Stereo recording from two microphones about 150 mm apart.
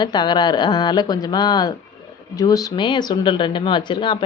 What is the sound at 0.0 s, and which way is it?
Speech, 30° left (ahead or behind).